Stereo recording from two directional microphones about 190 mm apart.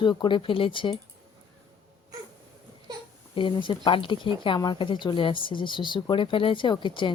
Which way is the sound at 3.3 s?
25° left (ahead or behind).